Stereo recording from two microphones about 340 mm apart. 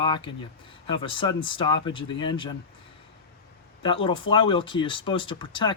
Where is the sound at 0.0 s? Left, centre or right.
Centre.